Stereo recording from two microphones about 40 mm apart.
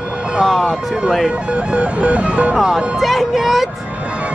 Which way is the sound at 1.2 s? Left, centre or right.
Right.